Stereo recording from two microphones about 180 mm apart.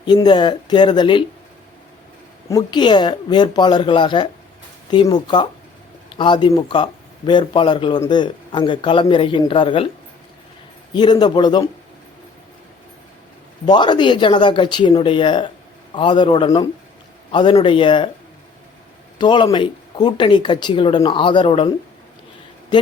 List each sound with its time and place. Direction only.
0.0 s speech: 25° left (ahead or behind)
2.5 s speech: 20° left (ahead or behind)
10.9 s speech: 25° left (ahead or behind)
13.7 s speech: 25° left (ahead or behind)
19.2 s speech: 25° left (ahead or behind)